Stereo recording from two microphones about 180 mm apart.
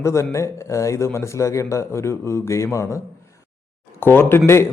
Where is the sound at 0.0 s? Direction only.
15° left (ahead or behind).